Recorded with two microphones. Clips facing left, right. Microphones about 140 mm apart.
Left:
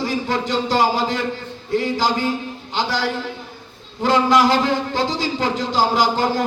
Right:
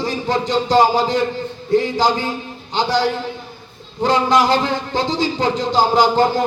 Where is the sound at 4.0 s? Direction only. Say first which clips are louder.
Even; 25° right (ahead or behind).